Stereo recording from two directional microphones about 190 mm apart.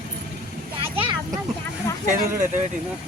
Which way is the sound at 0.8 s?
30° right (ahead or behind).